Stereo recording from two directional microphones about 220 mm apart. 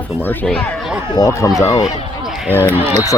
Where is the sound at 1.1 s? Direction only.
15° left (ahead or behind).